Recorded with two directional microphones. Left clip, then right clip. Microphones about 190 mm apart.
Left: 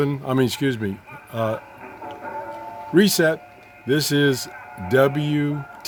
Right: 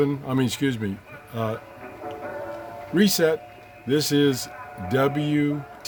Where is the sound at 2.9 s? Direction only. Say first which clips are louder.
Left 3 dB; 50° left (ahead or behind).